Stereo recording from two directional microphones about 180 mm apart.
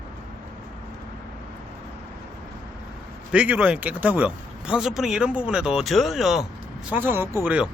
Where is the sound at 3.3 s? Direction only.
5° right (ahead or behind).